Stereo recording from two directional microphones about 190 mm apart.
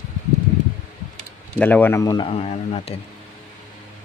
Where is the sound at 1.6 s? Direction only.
10° left (ahead or behind); by 3.0 s 30° left (ahead or behind).